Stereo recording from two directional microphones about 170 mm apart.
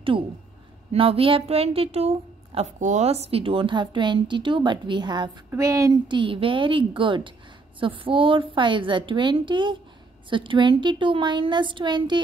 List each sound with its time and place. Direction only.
0.9 s a woman's voice: 35° right (ahead or behind)